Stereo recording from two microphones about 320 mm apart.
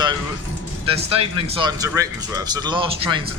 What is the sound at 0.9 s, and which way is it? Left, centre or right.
Speech, centre.